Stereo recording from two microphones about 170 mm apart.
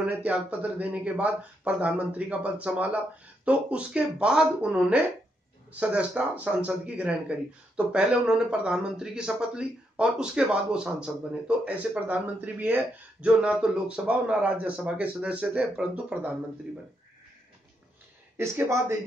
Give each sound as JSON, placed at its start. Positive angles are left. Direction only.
{"t": 0.0, "sound": "speech", "side_deg": -5}
{"t": 18.4, "sound": "speech", "side_deg": -15}